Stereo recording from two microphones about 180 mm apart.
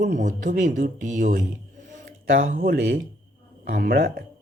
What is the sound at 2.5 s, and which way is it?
Speech, 50° right (ahead or behind).